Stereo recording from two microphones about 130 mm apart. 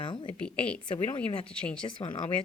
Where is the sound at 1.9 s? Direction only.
40° left (ahead or behind).